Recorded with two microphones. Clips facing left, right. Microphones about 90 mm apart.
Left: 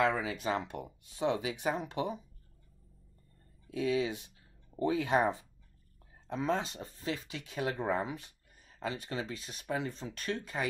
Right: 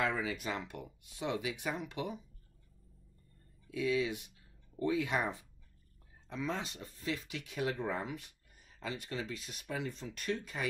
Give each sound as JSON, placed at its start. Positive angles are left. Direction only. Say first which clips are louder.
{"t": 0.0, "sound": "speech", "louder": "left 4 dB", "side_deg": 30}
{"t": 3.7, "sound": "speech", "louder": "left 2 dB", "side_deg": 35}